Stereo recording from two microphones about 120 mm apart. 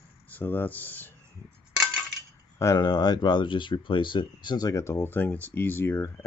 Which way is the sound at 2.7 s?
35° left (ahead or behind).